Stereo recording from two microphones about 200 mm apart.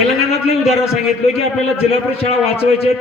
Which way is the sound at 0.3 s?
30° left (ahead or behind).